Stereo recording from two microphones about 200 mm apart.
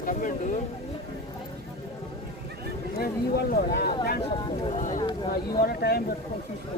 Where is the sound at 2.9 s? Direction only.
50° left (ahead or behind).